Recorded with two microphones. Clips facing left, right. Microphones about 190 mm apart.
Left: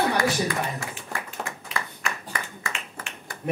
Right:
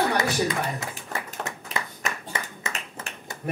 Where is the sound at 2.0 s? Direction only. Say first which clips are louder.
Right 1 dB; 20° right (ahead or behind).